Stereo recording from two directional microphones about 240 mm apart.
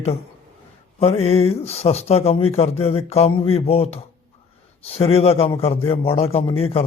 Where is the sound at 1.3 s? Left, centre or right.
Left.